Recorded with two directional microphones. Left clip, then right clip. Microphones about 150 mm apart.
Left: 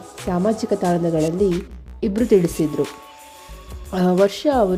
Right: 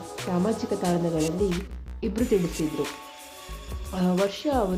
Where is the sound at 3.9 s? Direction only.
45° left (ahead or behind).